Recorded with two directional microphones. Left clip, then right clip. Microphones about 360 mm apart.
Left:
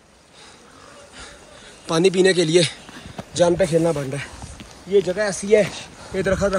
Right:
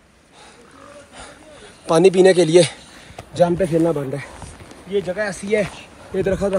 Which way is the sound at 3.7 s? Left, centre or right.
Left.